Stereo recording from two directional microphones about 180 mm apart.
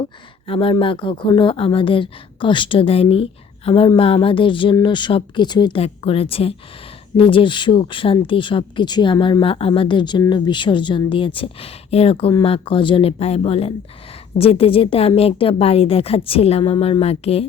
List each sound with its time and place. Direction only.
0.0 s a woman's voice: 30° left (ahead or behind)